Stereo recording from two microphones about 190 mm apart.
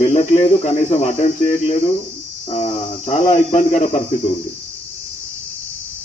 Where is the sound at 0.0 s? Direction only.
35° left (ahead or behind).